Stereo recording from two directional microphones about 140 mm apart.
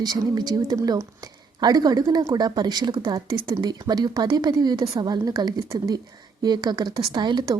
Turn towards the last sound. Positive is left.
turn(degrees=-30)  # may be behind; listen again after turning